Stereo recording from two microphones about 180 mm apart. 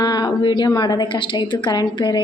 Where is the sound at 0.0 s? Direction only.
20° left (ahead or behind).